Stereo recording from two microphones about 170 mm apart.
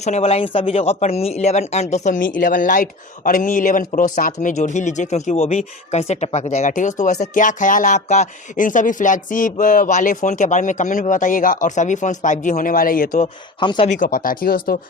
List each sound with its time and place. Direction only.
0.0 s speech: 40° left (ahead or behind); by 13.2 s 55° left (ahead or behind)
13.2 s speech: 30° left (ahead or behind)
13.8 s speech: 50° left (ahead or behind)